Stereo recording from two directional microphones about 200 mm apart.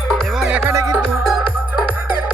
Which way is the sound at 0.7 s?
15° right (ahead or behind).